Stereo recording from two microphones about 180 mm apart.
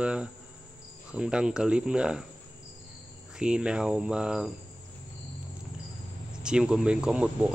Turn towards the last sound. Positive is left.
turn(degrees=-5)  # may be behind; listen again after turning